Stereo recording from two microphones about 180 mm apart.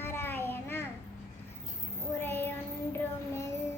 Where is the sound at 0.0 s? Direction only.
15° left (ahead or behind).